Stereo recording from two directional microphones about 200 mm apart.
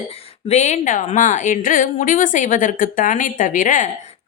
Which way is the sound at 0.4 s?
35° left (ahead or behind).